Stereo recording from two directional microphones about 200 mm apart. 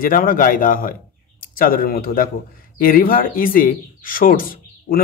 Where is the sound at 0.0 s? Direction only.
45° left (ahead or behind).